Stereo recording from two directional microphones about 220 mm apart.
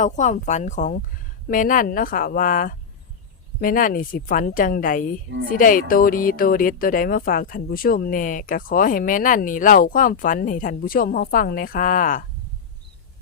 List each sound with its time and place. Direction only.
0.0 s speech: 35° left (ahead or behind)